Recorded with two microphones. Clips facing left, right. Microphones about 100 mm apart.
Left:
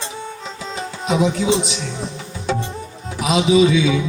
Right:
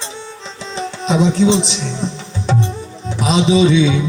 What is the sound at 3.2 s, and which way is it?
Speech, 25° right (ahead or behind).